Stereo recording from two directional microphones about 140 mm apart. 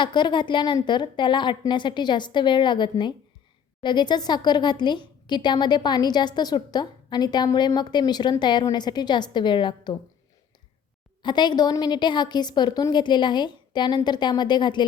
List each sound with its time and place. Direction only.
0.0 s a woman's voice: 35° left (ahead or behind)
11.2 s a woman's voice: 30° left (ahead or behind)